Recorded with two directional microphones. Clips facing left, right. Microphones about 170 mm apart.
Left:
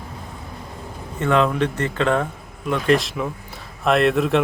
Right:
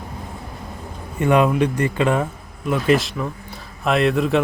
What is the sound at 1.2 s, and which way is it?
A man's voice, 15° right (ahead or behind).